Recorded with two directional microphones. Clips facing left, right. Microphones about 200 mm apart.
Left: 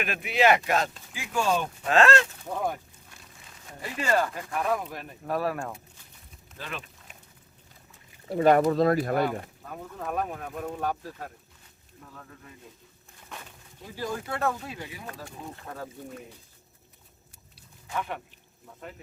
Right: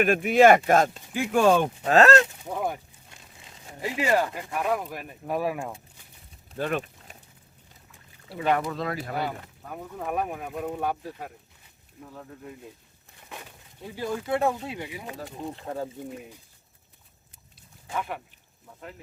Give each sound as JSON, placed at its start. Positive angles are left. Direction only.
{"t": 0.0, "sound": "speech", "side_deg": -50}
{"t": 1.9, "sound": "speech", "side_deg": -40}
{"t": 2.4, "sound": "speech", "side_deg": -10}
{"t": 3.1, "sound": "a sound", "side_deg": -20}
{"t": 4.5, "sound": "speech", "side_deg": -10}
{"t": 6.6, "sound": "a sound", "side_deg": -50}
{"t": 8.3, "sound": "speech", "side_deg": 45}
{"t": 9.6, "sound": "speech", "side_deg": -10}
{"t": 13.9, "sound": "speech", "side_deg": -15}